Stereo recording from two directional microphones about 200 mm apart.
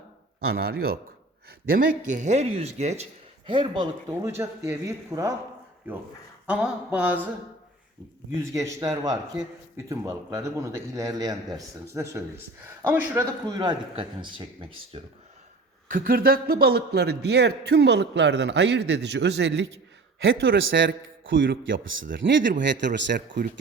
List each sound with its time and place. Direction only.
0.4 s speech: 50° right (ahead or behind); by 4.3 s 25° right (ahead or behind)
4.4 s a man's voice: 10° right (ahead or behind)
6.5 s a man's voice: 5° right (ahead or behind)
8.4 s a man's voice: 15° right (ahead or behind)
13.5 s speech: 20° right (ahead or behind)
15.9 s a man's voice: 45° right (ahead or behind)
20.2 s a man's voice: 70° right (ahead or behind)